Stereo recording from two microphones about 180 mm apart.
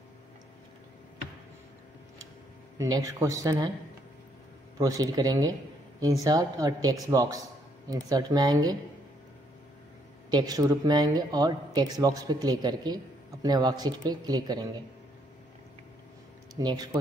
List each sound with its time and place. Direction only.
2.8 s speech: 20° right (ahead or behind)
4.7 s speech: 20° right (ahead or behind)
10.3 s speech: 20° right (ahead or behind)
16.5 s speech: 20° right (ahead or behind)